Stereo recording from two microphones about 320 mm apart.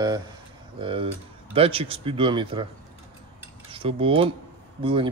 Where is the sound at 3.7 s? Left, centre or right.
Centre.